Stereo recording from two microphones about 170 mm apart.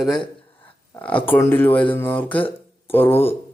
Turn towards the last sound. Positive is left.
turn(degrees=10)  # may be behind; listen again after turning